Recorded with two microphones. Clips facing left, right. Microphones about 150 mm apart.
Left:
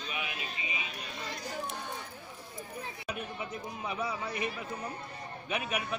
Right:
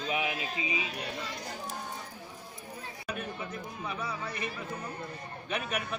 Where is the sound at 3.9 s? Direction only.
15° left (ahead or behind).